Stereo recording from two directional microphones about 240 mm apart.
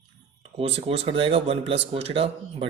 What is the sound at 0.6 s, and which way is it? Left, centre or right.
Speech, right.